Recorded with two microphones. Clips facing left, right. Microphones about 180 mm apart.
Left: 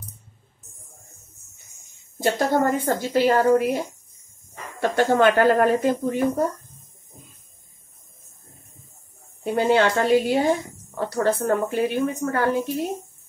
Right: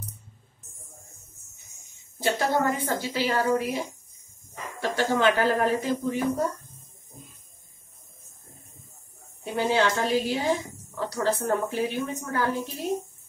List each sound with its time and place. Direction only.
2.3 s a woman's voice: 50° left (ahead or behind)
9.6 s a woman's voice: 60° left (ahead or behind)